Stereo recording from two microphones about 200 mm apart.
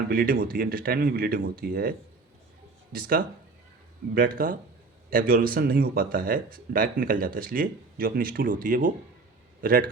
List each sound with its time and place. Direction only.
0.1 s speech: 45° right (ahead or behind)
2.9 s speech: 45° right (ahead or behind)